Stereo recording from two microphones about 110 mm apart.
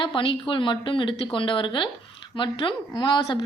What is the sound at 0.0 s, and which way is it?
A woman's voice, 50° left (ahead or behind).